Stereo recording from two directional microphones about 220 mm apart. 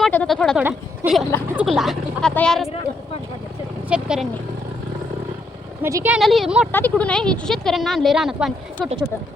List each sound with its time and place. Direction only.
0.0 s speech: 5° left (ahead or behind)
3.8 s speech: 5° right (ahead or behind)
5.8 s speech: 10° right (ahead or behind)